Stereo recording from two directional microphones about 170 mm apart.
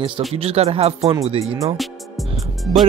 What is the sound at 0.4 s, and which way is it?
Speech, 35° right (ahead or behind).